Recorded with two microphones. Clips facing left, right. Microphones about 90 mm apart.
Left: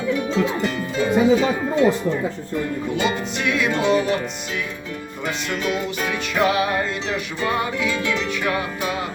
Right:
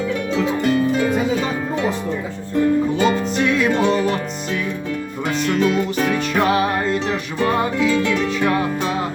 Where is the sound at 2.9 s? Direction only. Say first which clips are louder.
Right 5 dB; 35° right (ahead or behind).